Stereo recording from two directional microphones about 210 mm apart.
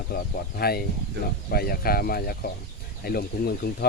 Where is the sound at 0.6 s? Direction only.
45° left (ahead or behind).